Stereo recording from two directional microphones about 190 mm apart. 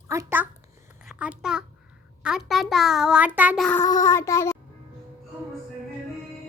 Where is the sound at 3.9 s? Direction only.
15° left (ahead or behind).